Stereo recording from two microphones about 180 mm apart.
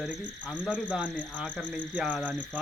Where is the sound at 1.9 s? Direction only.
5° right (ahead or behind).